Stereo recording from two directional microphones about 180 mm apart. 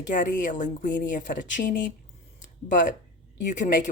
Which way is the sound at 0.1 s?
45° left (ahead or behind).